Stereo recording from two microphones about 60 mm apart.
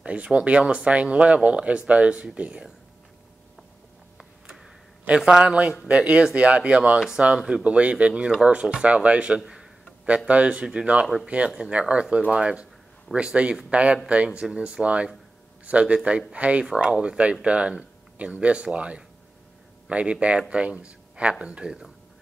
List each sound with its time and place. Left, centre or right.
0.0 s speech: right
5.0 s a man's voice: centre